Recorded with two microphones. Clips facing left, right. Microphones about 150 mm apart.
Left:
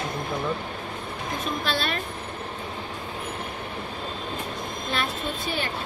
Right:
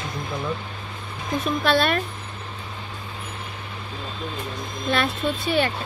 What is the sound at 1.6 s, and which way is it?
Speech, 60° right (ahead or behind).